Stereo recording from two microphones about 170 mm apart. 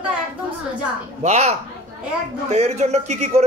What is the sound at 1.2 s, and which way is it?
A man's voice, 40° right (ahead or behind).